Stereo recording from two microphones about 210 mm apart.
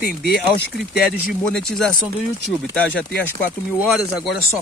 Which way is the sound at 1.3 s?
Centre (ahead or behind).